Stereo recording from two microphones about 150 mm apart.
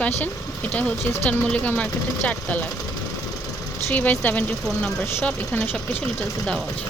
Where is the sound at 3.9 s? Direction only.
10° left (ahead or behind).